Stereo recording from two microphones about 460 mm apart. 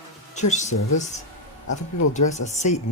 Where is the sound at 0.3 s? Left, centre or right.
Centre.